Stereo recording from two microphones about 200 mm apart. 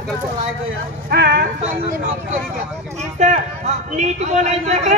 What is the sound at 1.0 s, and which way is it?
Speech, 55° right (ahead or behind).